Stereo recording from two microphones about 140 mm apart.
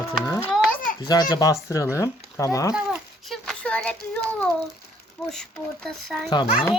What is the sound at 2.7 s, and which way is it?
Child singing, centre (ahead or behind).